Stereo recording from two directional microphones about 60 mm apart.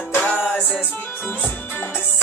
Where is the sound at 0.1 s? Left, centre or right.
Left.